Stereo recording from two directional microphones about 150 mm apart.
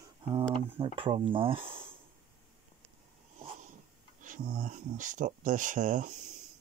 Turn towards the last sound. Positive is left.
turn(degrees=-60)  # may be behind; listen again after turning